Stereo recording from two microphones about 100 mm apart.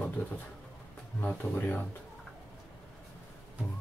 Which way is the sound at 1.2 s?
15° left (ahead or behind).